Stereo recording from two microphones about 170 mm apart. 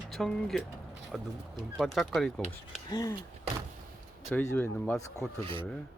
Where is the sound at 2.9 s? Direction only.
20° left (ahead or behind).